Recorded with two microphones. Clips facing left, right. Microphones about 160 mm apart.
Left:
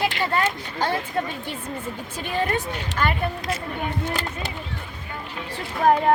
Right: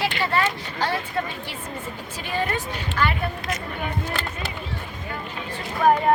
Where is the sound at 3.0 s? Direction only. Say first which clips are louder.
Even; 25° left (ahead or behind).